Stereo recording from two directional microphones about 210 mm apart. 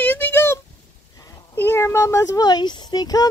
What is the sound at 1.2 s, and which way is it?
Speech, 10° left (ahead or behind).